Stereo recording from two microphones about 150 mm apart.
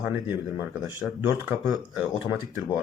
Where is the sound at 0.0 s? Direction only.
15° right (ahead or behind).